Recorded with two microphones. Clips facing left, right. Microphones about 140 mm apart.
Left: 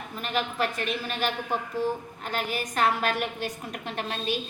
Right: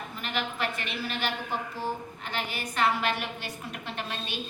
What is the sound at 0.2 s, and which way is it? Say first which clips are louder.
A woman's voice: left 4 dB; 40° left (ahead or behind).